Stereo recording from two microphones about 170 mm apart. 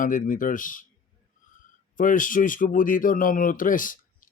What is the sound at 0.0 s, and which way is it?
Speech, 50° left (ahead or behind).